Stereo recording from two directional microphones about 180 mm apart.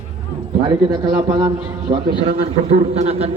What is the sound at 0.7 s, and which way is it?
A man's voice, 25° right (ahead or behind).